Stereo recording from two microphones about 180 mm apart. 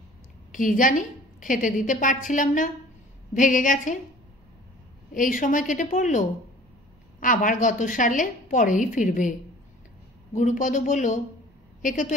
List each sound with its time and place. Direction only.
0.5 s a woman's voice: 50° left (ahead or behind)
5.1 s a woman's voice: 45° left (ahead or behind)
10.3 s a woman's voice: 45° left (ahead or behind)